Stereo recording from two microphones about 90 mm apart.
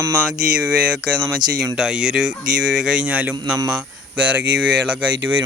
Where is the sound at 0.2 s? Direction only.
10° right (ahead or behind).